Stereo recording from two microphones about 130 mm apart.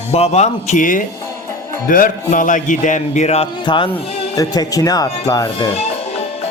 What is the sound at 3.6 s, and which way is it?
Speech, 40° left (ahead or behind).